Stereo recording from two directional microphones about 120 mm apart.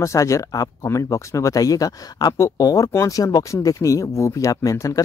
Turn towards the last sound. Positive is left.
turn(degrees=30)  # may be behind; listen again after turning